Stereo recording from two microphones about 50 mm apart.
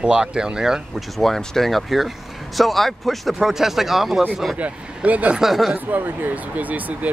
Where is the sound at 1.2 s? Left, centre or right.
Centre.